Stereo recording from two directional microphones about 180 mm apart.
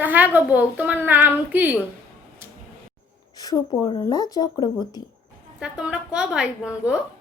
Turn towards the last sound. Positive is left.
turn(degrees=-5)  # may be behind; listen again after turning